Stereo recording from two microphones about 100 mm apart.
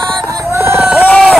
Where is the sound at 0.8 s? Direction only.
10° right (ahead or behind).